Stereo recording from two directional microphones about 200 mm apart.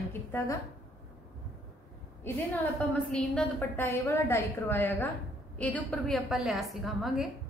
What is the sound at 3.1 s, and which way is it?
A woman's voice, 5° left (ahead or behind).